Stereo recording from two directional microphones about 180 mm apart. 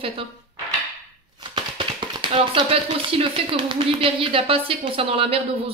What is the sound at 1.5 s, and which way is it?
Speech, 25° right (ahead or behind).